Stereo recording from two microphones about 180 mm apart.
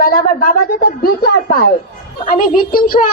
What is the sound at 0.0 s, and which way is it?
A woman's voice, 55° left (ahead or behind).